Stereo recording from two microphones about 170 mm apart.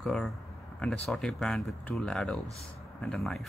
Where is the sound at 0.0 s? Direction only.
Centre (ahead or behind).